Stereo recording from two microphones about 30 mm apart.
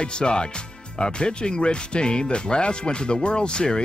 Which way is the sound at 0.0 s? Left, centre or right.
Left.